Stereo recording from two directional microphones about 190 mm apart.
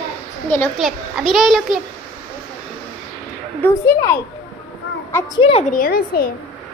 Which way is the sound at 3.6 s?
15° left (ahead or behind).